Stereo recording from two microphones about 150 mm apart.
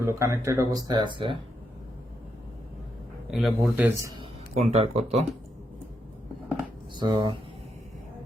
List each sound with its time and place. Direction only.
0.0 s speech: 20° right (ahead or behind)
3.3 s a man's voice: centre (ahead or behind)
4.2 s speech: 45° right (ahead or behind)
6.9 s speech: 30° right (ahead or behind)